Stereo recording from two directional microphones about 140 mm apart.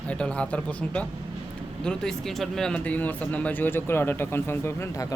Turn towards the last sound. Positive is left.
turn(degrees=20)  # may be behind; listen again after turning